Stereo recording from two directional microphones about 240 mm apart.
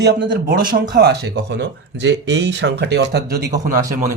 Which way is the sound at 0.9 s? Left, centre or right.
Right.